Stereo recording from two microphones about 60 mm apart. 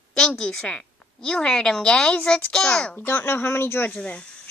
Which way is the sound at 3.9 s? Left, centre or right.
Centre.